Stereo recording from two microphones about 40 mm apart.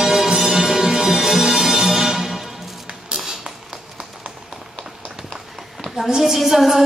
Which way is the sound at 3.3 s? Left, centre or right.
Centre.